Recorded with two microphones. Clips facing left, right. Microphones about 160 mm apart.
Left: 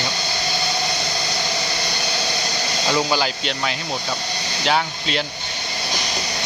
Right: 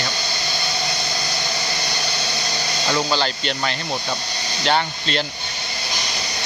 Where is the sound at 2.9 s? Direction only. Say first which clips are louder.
Left 1 dB; 10° left (ahead or behind).